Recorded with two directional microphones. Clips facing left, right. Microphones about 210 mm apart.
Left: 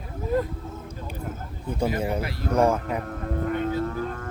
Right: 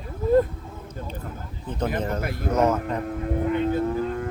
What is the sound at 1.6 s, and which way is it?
Speech, 10° left (ahead or behind).